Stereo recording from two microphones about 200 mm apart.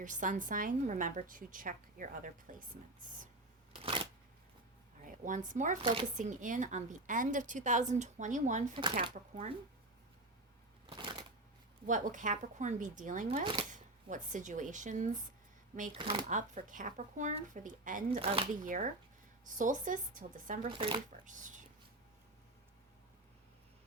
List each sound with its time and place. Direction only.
0.0 s a woman's voice: 40° right (ahead or behind)
4.9 s a sound: 40° right (ahead or behind)
5.5 s a woman's voice: 40° right (ahead or behind)
8.7 s speech: 25° right (ahead or behind)
10.8 s shuffling cards: 25° right (ahead or behind)
11.9 s a woman's voice: 40° right (ahead or behind)
13.7 s speech: 40° right (ahead or behind)
16.0 s speech: 25° right (ahead or behind)
16.3 s a woman's voice: 40° right (ahead or behind)
18.2 s speech: 30° right (ahead or behind)
18.6 s a woman's voice: 40° right (ahead or behind)
20.7 s speech: 25° right (ahead or behind)
21.3 s a woman's voice: 40° right (ahead or behind)